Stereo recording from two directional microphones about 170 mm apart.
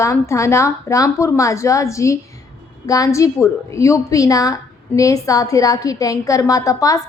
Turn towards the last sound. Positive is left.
turn(degrees=20)  # may be behind; listen again after turning